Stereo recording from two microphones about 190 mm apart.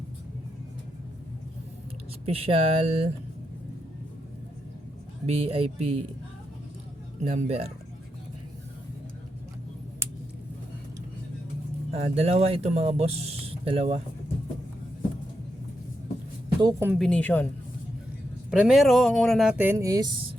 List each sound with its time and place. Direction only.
2.2 s speech: 30° right (ahead or behind)
5.2 s speech: 30° right (ahead or behind)
7.3 s speech: 35° right (ahead or behind)
11.9 s speech: 35° right (ahead or behind)
16.6 s speech: 20° right (ahead or behind)
16.9 s a woman's voice: centre (ahead or behind)
18.5 s speech: 5° right (ahead or behind)